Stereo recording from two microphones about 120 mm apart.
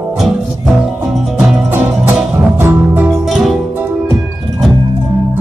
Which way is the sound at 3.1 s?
Centre (ahead or behind).